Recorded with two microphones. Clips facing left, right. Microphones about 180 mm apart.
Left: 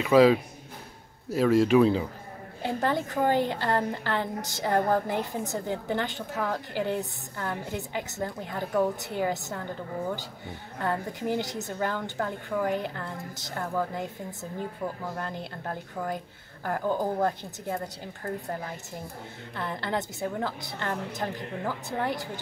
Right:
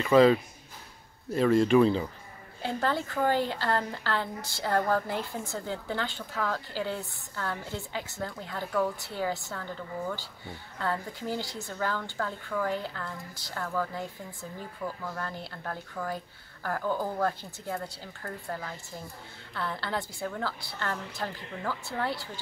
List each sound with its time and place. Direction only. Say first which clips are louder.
0.0 s speech: left 1 dB; 5° left (ahead or behind)
2.6 s a woman's voice: left 2 dB; 15° left (ahead or behind)